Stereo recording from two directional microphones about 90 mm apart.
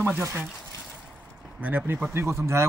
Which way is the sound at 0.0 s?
25° right (ahead or behind).